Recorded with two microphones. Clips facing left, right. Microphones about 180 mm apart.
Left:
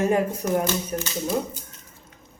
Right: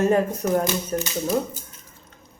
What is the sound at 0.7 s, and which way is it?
Speech, 10° right (ahead or behind).